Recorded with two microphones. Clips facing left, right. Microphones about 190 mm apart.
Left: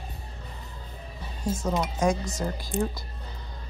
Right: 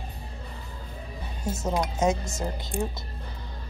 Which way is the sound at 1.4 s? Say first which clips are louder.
Even; 20° right (ahead or behind).